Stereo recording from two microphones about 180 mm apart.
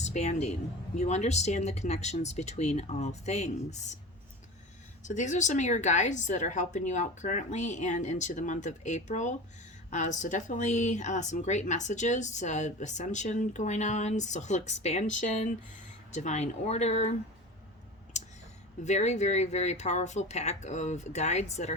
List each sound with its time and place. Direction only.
0.0 s speech: 40° left (ahead or behind)
5.0 s speech: 45° left (ahead or behind)
18.1 s whispering: 40° left (ahead or behind)
18.8 s speech: 40° left (ahead or behind)